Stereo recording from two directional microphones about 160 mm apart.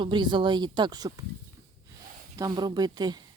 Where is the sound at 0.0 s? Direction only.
30° right (ahead or behind).